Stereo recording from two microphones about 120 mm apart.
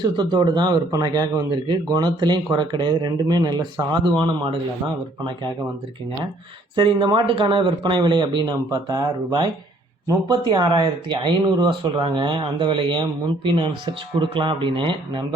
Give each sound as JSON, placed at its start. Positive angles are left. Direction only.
{"t": 0.0, "sound": "speech", "side_deg": -40}
{"t": 6.7, "sound": "speech", "side_deg": -40}